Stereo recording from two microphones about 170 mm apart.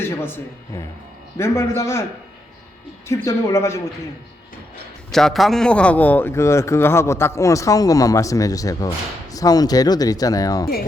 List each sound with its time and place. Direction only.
0.0 s a man's voice: 15° left (ahead or behind)
3.2 s a man's voice: 20° left (ahead or behind)
5.1 s a man's voice: centre (ahead or behind); by 10.7 s 20° left (ahead or behind)